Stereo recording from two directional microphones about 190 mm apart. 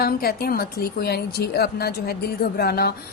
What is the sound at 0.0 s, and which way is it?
A woman's voice, 55° left (ahead or behind).